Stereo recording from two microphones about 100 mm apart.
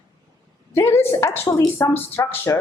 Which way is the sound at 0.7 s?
25° left (ahead or behind).